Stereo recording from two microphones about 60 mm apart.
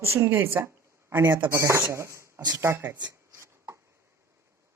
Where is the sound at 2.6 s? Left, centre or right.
Right.